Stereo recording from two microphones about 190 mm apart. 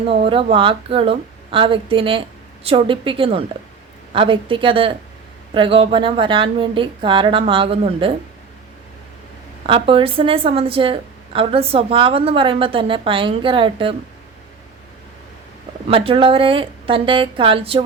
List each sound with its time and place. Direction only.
0.5 s a woman's voice: 30° right (ahead or behind)
9.6 s a woman's voice: 25° right (ahead or behind)
15.9 s a woman's voice: 30° right (ahead or behind)